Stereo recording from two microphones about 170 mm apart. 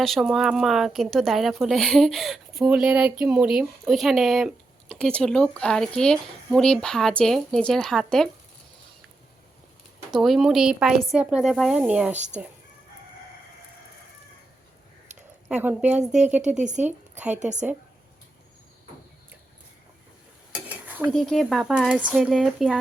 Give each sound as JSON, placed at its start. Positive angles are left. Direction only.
{"t": 0.0, "sound": "speech", "side_deg": 0}
{"t": 10.1, "sound": "a woman's voice", "side_deg": 0}
{"t": 12.1, "sound": "speech", "side_deg": -45}
{"t": 15.4, "sound": "a woman's voice", "side_deg": -10}
{"t": 17.4, "sound": "speech", "side_deg": -45}
{"t": 20.7, "sound": "stir", "side_deg": -10}
{"t": 21.1, "sound": "speech", "side_deg": 0}